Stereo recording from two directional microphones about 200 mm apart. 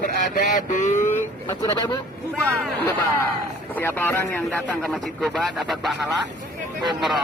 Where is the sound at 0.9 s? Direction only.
10° left (ahead or behind).